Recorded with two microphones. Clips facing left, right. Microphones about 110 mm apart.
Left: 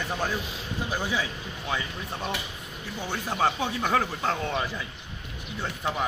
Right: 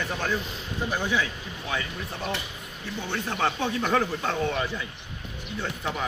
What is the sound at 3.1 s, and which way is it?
Speech, 10° left (ahead or behind).